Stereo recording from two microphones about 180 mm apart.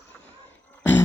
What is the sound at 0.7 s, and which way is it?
Grunt, 10° left (ahead or behind).